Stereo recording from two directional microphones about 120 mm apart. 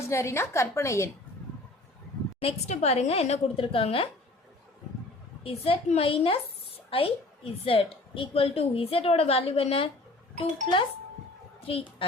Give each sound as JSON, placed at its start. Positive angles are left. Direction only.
{"t": 0.1, "sound": "a woman's voice", "side_deg": 20}
{"t": 2.4, "sound": "a woman's voice", "side_deg": 60}
{"t": 3.6, "sound": "a woman's voice", "side_deg": 50}
{"t": 5.4, "sound": "a woman's voice", "side_deg": 55}